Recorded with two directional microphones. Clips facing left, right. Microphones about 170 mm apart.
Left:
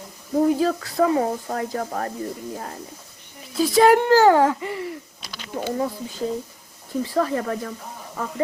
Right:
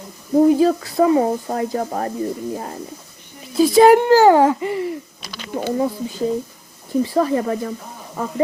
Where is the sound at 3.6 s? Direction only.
15° right (ahead or behind).